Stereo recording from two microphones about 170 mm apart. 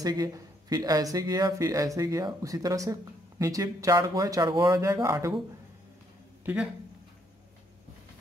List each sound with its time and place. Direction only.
0.0 s speech: 20° right (ahead or behind)
6.4 s speech: 5° right (ahead or behind)